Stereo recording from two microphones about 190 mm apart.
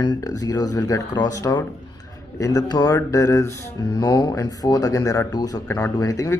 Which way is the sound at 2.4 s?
20° left (ahead or behind).